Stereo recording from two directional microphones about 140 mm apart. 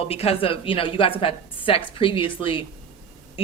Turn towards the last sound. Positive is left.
turn(degrees=40)  # may be behind; listen again after turning